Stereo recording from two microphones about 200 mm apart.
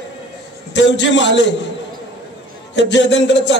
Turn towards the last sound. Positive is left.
turn(degrees=65)  # may be behind; listen again after turning